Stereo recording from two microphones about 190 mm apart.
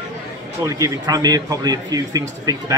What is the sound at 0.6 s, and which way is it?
Speech, 20° right (ahead or behind).